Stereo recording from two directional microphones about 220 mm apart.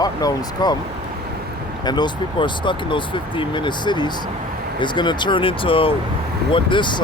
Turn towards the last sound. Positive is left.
turn(degrees=20)  # may be behind; listen again after turning